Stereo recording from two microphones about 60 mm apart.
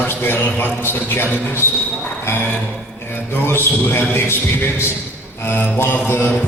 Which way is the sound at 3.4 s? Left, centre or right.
Left.